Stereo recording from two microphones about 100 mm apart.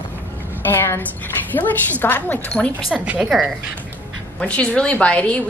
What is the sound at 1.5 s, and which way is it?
A woman's voice, 20° left (ahead or behind).